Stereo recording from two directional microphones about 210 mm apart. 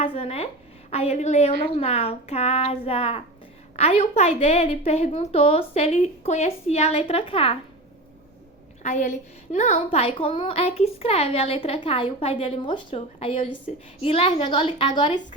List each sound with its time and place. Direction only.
0.0 s a woman's voice: 25° left (ahead or behind)
8.8 s a woman's voice: 35° left (ahead or behind)